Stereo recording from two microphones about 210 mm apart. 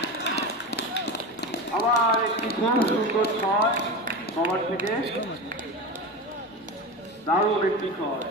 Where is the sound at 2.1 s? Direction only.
50° left (ahead or behind).